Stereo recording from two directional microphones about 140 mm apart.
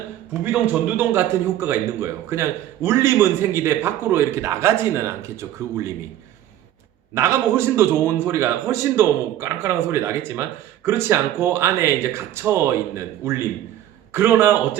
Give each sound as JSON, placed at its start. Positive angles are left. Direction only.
{"t": 0.4, "sound": "a man's voice", "side_deg": -10}
{"t": 7.1, "sound": "a man's voice", "side_deg": -20}